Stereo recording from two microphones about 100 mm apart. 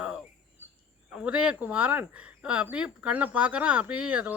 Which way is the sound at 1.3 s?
10° right (ahead or behind).